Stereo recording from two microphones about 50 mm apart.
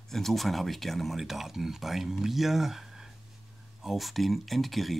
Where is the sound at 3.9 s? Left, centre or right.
Centre.